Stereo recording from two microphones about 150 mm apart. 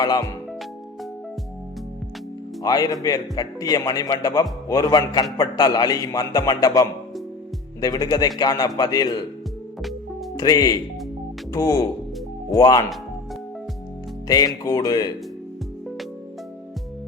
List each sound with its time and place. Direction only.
0.0 s a man's voice: 25° left (ahead or behind)
2.6 s a man's voice: 25° left (ahead or behind)
10.3 s a man's voice: 25° left (ahead or behind)
14.3 s a man's voice: 25° left (ahead or behind)